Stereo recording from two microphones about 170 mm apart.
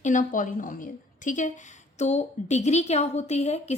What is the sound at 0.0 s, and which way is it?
A woman's voice, 45° left (ahead or behind).